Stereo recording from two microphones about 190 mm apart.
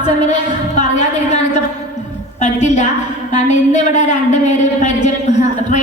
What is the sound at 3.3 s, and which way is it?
A woman's voice, 40° left (ahead or behind).